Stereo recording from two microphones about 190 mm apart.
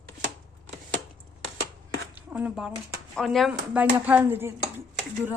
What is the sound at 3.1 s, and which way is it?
Speech, centre (ahead or behind).